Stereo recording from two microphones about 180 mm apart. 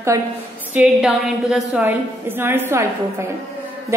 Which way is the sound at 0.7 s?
5° right (ahead or behind).